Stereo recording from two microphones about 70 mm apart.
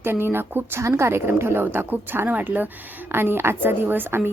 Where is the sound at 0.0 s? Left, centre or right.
Right.